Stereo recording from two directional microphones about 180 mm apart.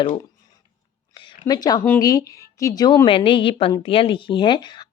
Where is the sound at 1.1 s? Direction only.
25° left (ahead or behind).